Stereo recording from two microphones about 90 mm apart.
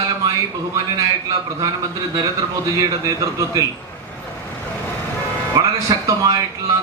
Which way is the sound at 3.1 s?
40° right (ahead or behind).